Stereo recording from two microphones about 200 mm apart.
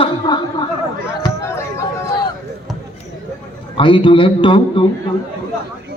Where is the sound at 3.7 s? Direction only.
25° left (ahead or behind).